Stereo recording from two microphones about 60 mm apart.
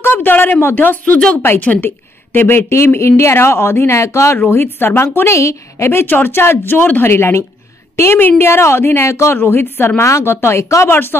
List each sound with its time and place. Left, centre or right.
0.0 s a woman's voice: left
2.7 s speech: left
4.5 s a woman's voice: left
5.3 s a woman's voice: left
9.4 s a woman's voice: left
10.9 s a woman's voice: left